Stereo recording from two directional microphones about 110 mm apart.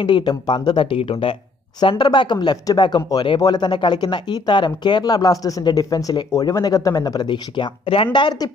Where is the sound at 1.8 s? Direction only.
45° left (ahead or behind).